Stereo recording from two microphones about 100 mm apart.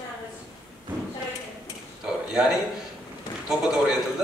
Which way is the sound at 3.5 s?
5° right (ahead or behind).